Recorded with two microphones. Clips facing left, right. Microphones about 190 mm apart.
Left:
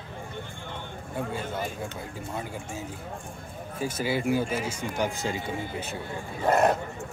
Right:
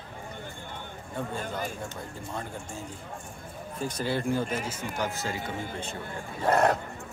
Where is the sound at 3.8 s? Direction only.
5° left (ahead or behind).